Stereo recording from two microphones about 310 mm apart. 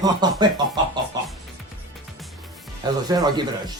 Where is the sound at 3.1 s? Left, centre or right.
Centre.